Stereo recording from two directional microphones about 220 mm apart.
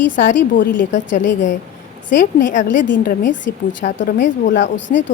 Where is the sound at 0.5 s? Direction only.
35° left (ahead or behind).